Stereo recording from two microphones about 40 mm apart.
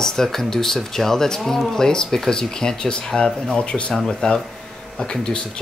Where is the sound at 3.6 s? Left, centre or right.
Left.